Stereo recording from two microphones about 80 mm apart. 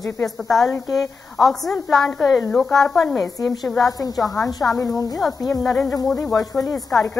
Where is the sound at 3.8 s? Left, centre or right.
Left.